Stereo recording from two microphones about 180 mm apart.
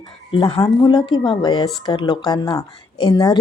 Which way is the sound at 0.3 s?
30° left (ahead or behind).